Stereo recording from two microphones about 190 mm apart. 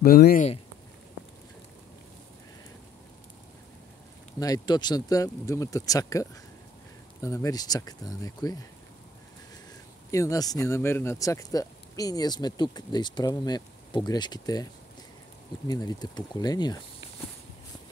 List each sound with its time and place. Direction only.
0.0 s speech: 50° left (ahead or behind)
4.4 s speech: 20° left (ahead or behind)
10.1 s speech: 15° left (ahead or behind)